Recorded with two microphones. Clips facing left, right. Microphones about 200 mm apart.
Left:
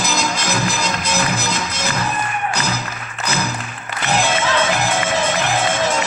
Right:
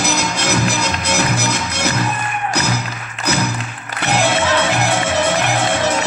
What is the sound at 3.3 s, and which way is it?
Music, 70° right (ahead or behind).